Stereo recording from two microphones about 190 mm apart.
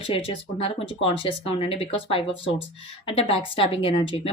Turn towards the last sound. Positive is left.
turn(degrees=30)  # may be behind; listen again after turning